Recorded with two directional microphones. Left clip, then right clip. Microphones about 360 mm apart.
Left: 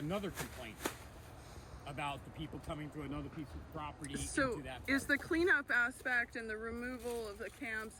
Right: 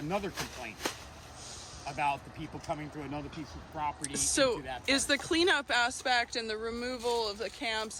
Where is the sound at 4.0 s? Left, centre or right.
Centre.